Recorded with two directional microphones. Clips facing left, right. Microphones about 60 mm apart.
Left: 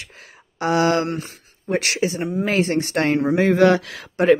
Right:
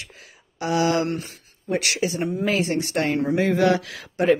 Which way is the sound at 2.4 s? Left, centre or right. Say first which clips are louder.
Left 4 dB; left.